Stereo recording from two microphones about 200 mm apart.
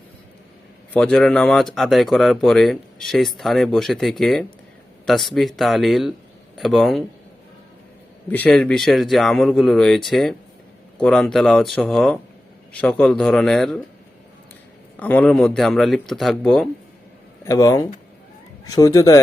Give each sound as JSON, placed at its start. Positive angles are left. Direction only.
{"t": 0.9, "sound": "speech", "side_deg": 5}
{"t": 8.3, "sound": "speech", "side_deg": 5}
{"t": 14.9, "sound": "speech", "side_deg": 10}
{"t": 17.4, "sound": "speech", "side_deg": 15}